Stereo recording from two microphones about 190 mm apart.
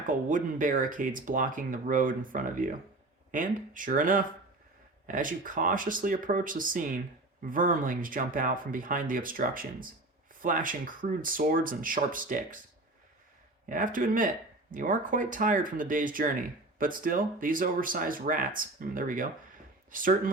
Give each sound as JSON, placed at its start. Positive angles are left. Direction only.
{"t": 0.0, "sound": "speech", "side_deg": -45}
{"t": 13.7, "sound": "speech", "side_deg": -45}